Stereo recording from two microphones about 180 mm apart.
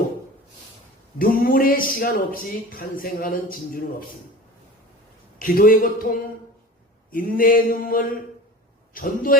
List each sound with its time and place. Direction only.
1.2 s speech: 50° left (ahead or behind)
5.4 s speech: 50° left (ahead or behind)
7.1 s speech: 50° left (ahead or behind)